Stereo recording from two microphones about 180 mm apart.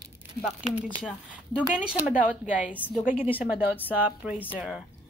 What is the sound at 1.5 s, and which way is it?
Speech, 10° right (ahead or behind).